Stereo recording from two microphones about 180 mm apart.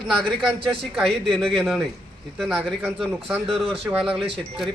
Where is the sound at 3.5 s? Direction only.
30° right (ahead or behind).